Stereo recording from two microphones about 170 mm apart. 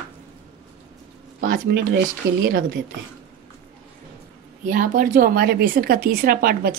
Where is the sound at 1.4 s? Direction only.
60° right (ahead or behind); by 2.7 s 75° right (ahead or behind).